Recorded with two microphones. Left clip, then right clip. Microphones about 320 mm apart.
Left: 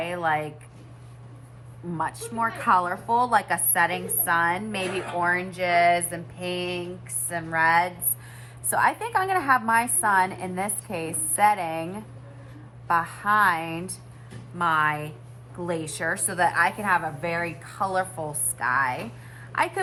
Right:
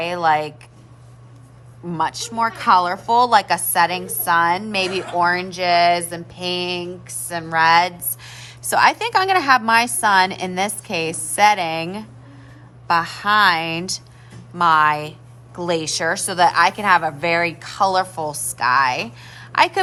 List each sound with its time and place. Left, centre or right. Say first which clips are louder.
0.0 s speech: right 8 dB; centre
1.9 s a woman's voice: right 7 dB; right
5.2 s a sound: right 6 dB; centre
8.8 s a woman's voice: right 7 dB; right
14.6 s a woman's voice: right 8 dB; right
15.6 s a sound: right 8 dB; centre
17.2 s a woman's voice: right 9 dB; right
18.5 s a woman's voice: right 8 dB; right